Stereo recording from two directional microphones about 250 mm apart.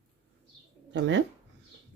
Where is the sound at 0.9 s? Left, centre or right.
Right.